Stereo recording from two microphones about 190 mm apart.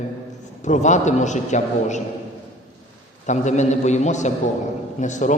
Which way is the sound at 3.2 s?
40° left (ahead or behind).